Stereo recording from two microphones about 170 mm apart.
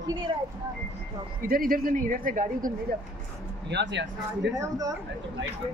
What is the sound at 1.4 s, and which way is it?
Speech, 60° right (ahead or behind).